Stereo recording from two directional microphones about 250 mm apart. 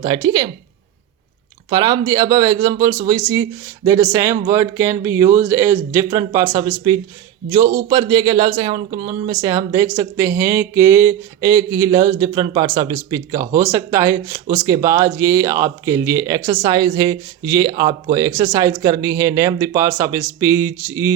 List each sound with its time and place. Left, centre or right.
0.0 s speech: centre
1.7 s speech: centre